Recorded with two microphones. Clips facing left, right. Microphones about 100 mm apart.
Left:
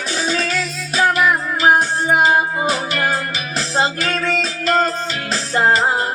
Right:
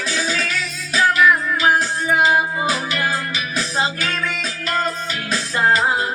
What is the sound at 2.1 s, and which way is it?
Music, 40° left (ahead or behind).